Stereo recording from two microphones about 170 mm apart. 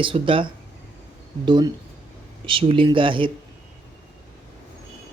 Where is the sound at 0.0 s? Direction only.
30° right (ahead or behind).